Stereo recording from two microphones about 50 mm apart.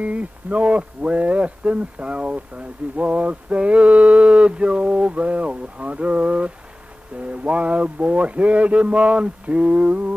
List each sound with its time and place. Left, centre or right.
0.0 s speech: right